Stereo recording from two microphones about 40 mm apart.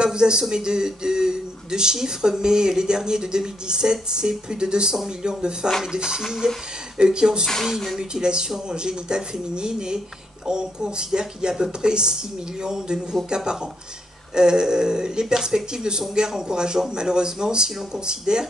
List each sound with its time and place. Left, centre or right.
0.0 s speech: right
7.6 s speech: centre
8.0 s speech: right
17.6 s speech: centre
18.0 s speech: centre